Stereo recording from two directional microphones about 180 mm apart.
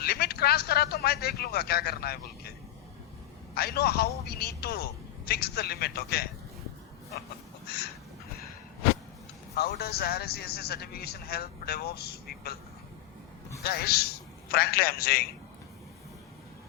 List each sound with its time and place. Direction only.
0.0 s speech: 60° left (ahead or behind)
3.5 s a man's voice: 60° left (ahead or behind)
9.6 s a man's voice: 60° left (ahead or behind)
13.6 s a man's voice: 60° left (ahead or behind)